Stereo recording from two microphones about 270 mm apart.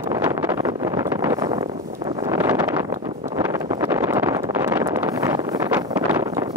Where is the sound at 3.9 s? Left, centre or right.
Centre.